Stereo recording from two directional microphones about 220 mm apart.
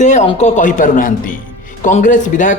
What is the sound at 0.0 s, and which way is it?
Speech, 35° left (ahead or behind).